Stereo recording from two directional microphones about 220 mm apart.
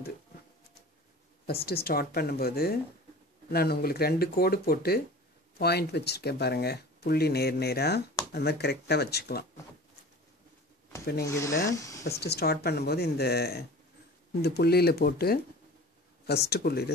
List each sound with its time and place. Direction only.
1.4 s speech: 45° left (ahead or behind)
11.2 s speech: 15° left (ahead or behind)
12.0 s speech: 45° left (ahead or behind)